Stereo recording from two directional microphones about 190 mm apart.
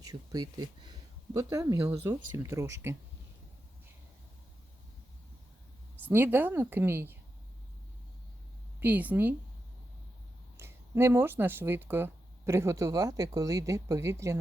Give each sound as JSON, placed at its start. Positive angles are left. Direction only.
{"t": 0.0, "sound": "speech", "side_deg": -20}
{"t": 6.1, "sound": "speech", "side_deg": -10}
{"t": 8.8, "sound": "speech", "side_deg": -10}
{"t": 10.6, "sound": "speech", "side_deg": -10}